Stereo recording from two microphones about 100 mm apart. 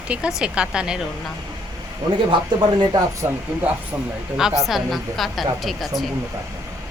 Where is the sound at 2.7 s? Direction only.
45° right (ahead or behind).